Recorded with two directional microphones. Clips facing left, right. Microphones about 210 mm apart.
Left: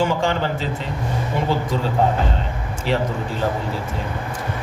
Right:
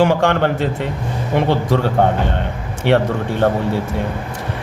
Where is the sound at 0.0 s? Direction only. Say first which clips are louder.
Right 6 dB; 65° right (ahead or behind).